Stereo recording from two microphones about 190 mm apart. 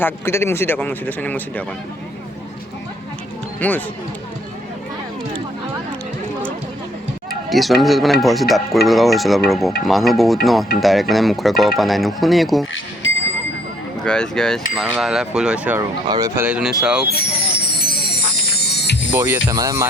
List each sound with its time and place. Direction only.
0.0 s a man's voice: 15° left (ahead or behind)
3.6 s a man's voice: 10° left (ahead or behind)
7.3 s speech: centre (ahead or behind)
8.2 s cutlery: centre (ahead or behind)
14.0 s cutlery: 5° left (ahead or behind)
15.8 s speech: 20° right (ahead or behind); by 17.1 s 5° right (ahead or behind)
17.1 s music: 60° left (ahead or behind)
18.6 s a sound: 60° left (ahead or behind)
19.1 s speech: 10° right (ahead or behind)